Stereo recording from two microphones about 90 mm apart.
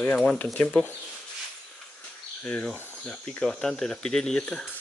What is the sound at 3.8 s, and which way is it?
Speech, 5° left (ahead or behind).